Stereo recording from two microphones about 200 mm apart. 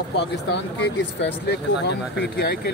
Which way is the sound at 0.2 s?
55° left (ahead or behind).